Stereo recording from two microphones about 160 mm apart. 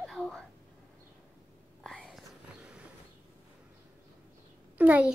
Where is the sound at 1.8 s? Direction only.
Centre (ahead or behind).